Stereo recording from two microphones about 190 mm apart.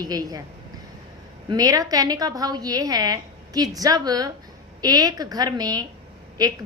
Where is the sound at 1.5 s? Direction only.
20° right (ahead or behind).